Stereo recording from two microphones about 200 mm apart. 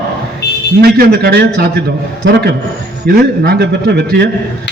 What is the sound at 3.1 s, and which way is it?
A man's voice, 55° right (ahead or behind).